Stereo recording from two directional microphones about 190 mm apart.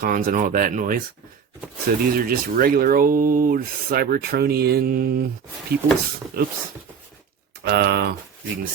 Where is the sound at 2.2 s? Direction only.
50° right (ahead or behind).